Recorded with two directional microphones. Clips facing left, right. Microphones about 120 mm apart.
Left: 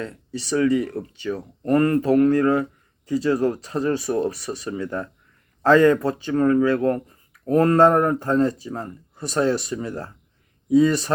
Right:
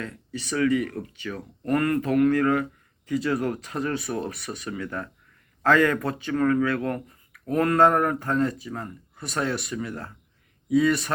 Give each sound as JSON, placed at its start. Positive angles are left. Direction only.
{"t": 0.0, "sound": "speech", "side_deg": 30}